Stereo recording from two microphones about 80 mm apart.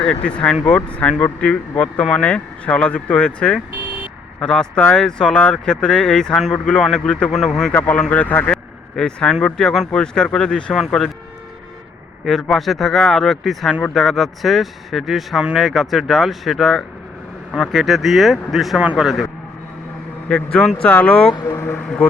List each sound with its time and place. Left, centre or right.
0.0 s speech: centre
7.3 s speech: centre
7.7 s speech: centre
9.0 s speech: centre
12.2 s speech: centre
20.2 s speech: centre
21.4 s speech: left